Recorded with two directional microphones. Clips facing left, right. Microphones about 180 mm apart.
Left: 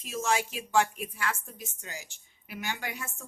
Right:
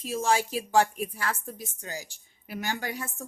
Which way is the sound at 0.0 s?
35° right (ahead or behind).